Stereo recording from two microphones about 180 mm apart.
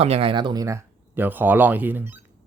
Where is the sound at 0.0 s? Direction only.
35° right (ahead or behind); by 2.1 s 10° right (ahead or behind).